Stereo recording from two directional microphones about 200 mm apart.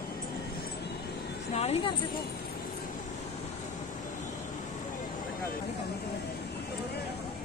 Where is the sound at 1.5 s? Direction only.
30° left (ahead or behind).